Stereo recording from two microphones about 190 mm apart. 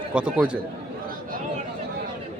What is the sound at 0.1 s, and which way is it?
Speech, 5° right (ahead or behind).